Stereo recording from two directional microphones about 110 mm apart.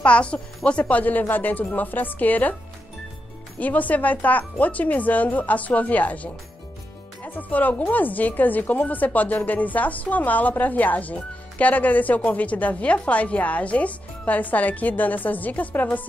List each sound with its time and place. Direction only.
0.0 s a woman's voice: 10° left (ahead or behind)
3.5 s a woman's voice: 15° left (ahead or behind)